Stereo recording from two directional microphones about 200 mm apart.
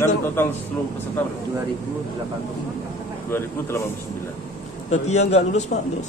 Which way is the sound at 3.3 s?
10° left (ahead or behind).